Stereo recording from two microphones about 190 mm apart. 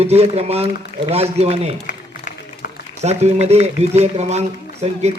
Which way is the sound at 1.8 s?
45° left (ahead or behind).